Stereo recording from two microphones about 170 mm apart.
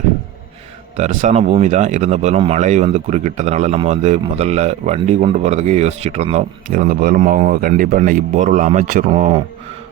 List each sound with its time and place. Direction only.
0.9 s speech: 45° right (ahead or behind)
6.7 s a man's voice: 55° right (ahead or behind)
9.1 s speech: 35° right (ahead or behind)